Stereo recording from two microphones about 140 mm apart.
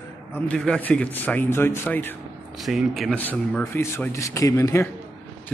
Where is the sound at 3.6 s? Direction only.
20° left (ahead or behind).